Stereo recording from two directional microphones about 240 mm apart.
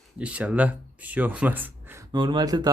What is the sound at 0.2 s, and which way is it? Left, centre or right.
Speech, centre.